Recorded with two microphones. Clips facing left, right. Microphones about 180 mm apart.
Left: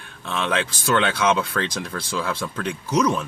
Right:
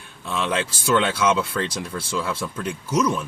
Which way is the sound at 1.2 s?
55° left (ahead or behind).